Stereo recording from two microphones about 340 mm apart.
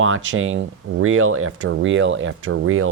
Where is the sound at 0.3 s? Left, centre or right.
Right.